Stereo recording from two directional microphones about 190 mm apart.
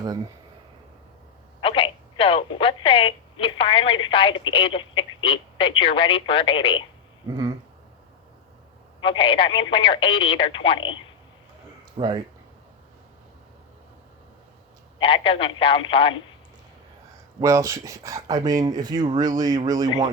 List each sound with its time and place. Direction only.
1.6 s speech: 30° left (ahead or behind)
9.0 s speech: 25° left (ahead or behind)
11.9 s speech: 25° right (ahead or behind)
14.9 s speech: 25° left (ahead or behind)
17.4 s speech: 15° right (ahead or behind)